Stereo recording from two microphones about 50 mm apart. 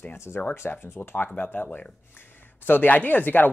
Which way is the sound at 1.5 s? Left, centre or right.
Left.